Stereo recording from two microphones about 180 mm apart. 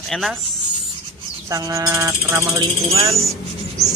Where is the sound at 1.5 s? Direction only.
15° right (ahead or behind).